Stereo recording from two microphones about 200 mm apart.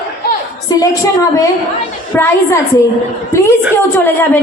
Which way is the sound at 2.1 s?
10° left (ahead or behind).